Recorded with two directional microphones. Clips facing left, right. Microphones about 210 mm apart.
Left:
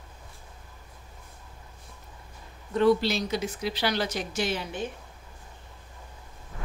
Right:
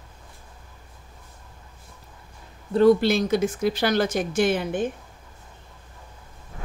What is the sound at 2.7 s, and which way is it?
A woman's voice, 45° right (ahead or behind).